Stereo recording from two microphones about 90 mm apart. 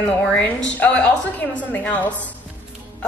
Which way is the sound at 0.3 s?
15° left (ahead or behind).